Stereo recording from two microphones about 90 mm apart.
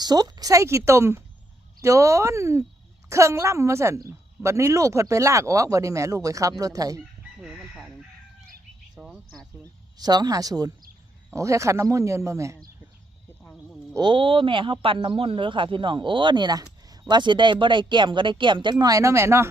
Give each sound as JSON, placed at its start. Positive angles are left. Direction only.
{"t": 0.0, "sound": "a woman's voice", "side_deg": -50}
{"t": 9.0, "sound": "insect", "side_deg": -5}
{"t": 10.0, "sound": "a woman's voice", "side_deg": -50}
{"t": 14.0, "sound": "speech", "side_deg": -65}